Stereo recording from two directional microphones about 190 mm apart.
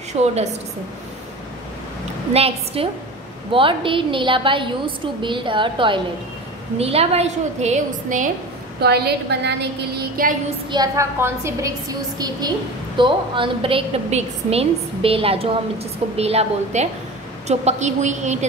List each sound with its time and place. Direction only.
0.2 s a woman's voice: 35° right (ahead or behind)
2.3 s a woman's voice: 30° right (ahead or behind)
8.8 s a woman's voice: 60° right (ahead or behind)
10.7 s a woman's voice: 15° right (ahead or behind); by 18.5 s 40° right (ahead or behind)